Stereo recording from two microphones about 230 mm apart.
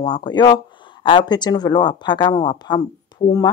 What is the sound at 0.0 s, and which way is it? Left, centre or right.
Speech, centre.